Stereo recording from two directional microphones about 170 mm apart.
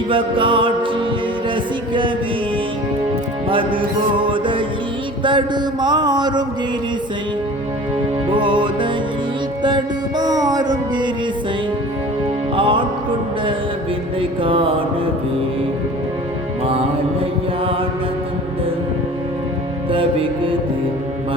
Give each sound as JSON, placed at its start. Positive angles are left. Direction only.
{"t": 0.1, "sound": "a sound", "side_deg": -30}
{"t": 1.9, "sound": "music", "side_deg": -30}
{"t": 3.5, "sound": "a sound", "side_deg": -30}
{"t": 8.3, "sound": "a sound", "side_deg": -30}
{"t": 9.6, "sound": "music", "side_deg": -25}
{"t": 12.5, "sound": "music", "side_deg": -30}
{"t": 14.2, "sound": "music", "side_deg": -30}
{"t": 16.6, "sound": "music", "side_deg": -35}
{"t": 19.9, "sound": "music", "side_deg": -30}